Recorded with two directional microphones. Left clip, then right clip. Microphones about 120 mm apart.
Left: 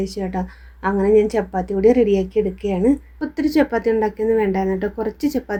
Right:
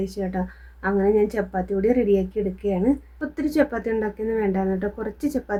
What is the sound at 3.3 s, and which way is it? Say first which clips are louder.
A woman's voice: left 4 dB; 20° left (ahead or behind).